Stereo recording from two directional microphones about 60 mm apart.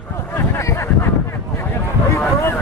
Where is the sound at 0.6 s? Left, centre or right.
Left.